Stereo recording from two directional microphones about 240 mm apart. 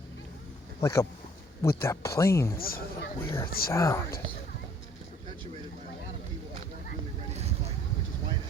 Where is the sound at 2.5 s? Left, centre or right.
Left.